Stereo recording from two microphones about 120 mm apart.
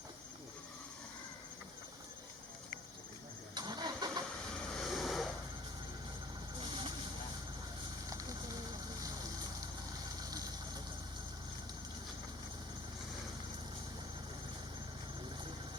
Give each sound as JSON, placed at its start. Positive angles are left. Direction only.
{"t": 3.5, "sound": "vehicle", "side_deg": -35}
{"t": 4.7, "sound": "vehicle", "side_deg": 0}
{"t": 6.6, "sound": "vehicle", "side_deg": -45}